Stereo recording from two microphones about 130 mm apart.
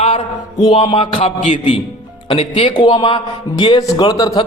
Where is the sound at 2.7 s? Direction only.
35° left (ahead or behind).